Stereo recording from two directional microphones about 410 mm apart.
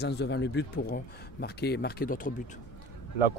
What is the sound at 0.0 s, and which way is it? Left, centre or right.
Speech, left.